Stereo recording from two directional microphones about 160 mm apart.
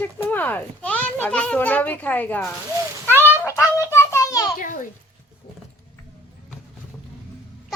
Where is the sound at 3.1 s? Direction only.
15° right (ahead or behind).